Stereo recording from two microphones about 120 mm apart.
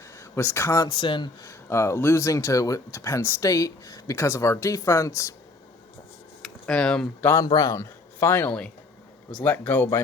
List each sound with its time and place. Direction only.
0.2 s speech: 20° left (ahead or behind); by 1.3 s 40° left (ahead or behind)
1.4 s speech: 25° left (ahead or behind)
6.4 s a sound: 5° left (ahead or behind)
7.2 s speech: 20° left (ahead or behind)
7.4 s speech: 30° left (ahead or behind); by 10.0 s 15° left (ahead or behind)